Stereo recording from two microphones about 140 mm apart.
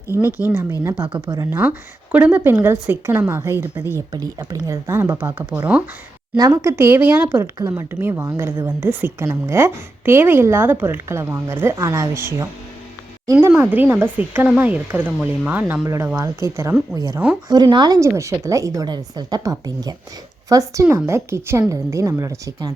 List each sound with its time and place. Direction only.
0.2 s speech: 15° right (ahead or behind)
1.0 s speech: 35° right (ahead or behind)
1.4 s speech: 15° right (ahead or behind)
3.9 s a woman's voice: 25° right (ahead or behind); by 5.8 s 10° right (ahead or behind)
6.3 s speech: 25° right (ahead or behind)
13.6 s a woman's voice: 10° right (ahead or behind)